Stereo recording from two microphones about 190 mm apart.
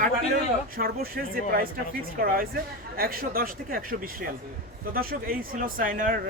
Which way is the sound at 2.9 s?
50° right (ahead or behind).